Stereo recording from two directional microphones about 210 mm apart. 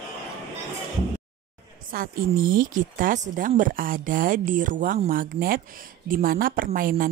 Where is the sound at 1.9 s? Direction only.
45° right (ahead or behind).